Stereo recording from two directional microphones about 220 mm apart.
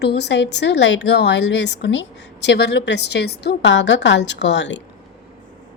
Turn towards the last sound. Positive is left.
turn(degrees=55)  # may be behind; listen again after turning